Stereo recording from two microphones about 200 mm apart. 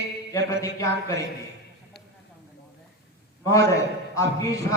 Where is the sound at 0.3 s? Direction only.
15° left (ahead or behind).